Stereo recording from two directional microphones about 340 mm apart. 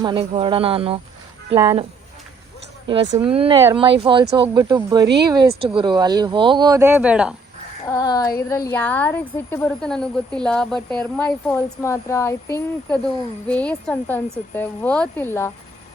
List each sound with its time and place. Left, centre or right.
0.0 s speech: centre
7.9 s a sound: centre
8.4 s speech: centre